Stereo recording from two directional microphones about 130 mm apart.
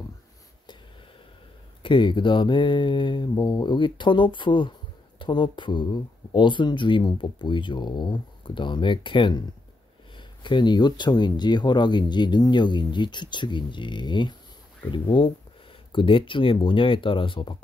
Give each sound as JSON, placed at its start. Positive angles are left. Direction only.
{"t": 1.8, "sound": "speech", "side_deg": 40}